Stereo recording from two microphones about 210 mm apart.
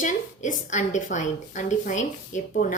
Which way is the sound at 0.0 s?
35° left (ahead or behind).